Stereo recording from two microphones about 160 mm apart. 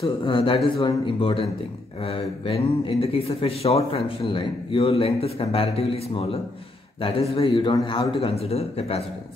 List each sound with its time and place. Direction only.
0.0 s speech: 35° left (ahead or behind)